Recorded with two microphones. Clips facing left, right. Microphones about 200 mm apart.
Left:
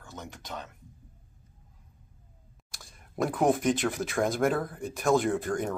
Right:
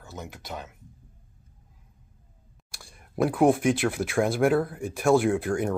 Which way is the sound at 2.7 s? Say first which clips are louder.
Right 4 dB; 10° right (ahead or behind).